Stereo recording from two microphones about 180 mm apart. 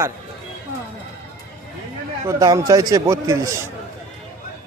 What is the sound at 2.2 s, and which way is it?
A man's voice, 20° right (ahead or behind).